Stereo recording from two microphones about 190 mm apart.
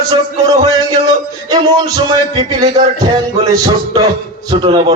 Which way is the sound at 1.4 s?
20° right (ahead or behind).